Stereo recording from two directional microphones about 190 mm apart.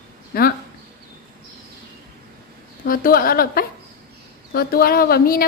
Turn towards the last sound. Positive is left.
turn(degrees=50)  # may be behind; listen again after turning